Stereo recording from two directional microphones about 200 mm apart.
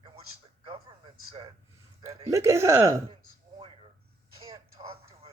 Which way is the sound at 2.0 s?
35° right (ahead or behind).